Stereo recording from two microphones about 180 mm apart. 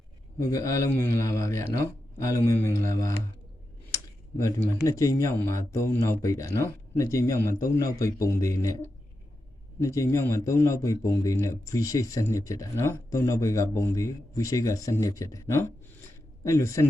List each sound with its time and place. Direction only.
0.3 s a man's voice: 15° left (ahead or behind)
4.4 s a man's voice: 15° left (ahead or behind)